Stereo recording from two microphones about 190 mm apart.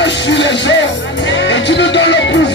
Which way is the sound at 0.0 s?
70° left (ahead or behind).